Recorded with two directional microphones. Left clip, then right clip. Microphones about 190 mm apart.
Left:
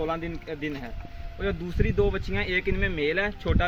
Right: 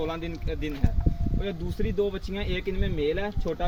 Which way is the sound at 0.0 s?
20° left (ahead or behind).